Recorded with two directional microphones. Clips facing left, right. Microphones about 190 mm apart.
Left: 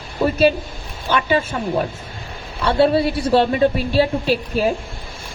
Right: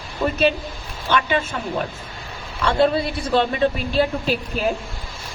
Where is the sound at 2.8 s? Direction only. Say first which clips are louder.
Left 5 dB; 35° left (ahead or behind).